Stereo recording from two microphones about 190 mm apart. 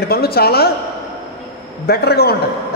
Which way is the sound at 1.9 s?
55° left (ahead or behind).